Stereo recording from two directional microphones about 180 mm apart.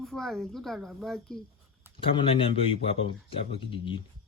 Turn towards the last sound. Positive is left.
turn(degrees=30)  # may be behind; listen again after turning